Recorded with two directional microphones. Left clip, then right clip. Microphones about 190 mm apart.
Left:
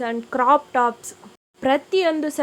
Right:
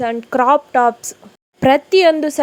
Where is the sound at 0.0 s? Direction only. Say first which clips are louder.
Right 5 dB; 25° right (ahead or behind).